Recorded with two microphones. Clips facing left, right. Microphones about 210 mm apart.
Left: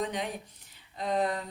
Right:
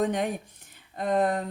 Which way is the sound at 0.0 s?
50° right (ahead or behind).